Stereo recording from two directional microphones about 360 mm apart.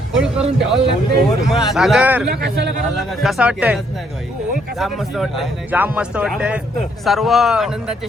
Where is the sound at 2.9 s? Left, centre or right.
Centre.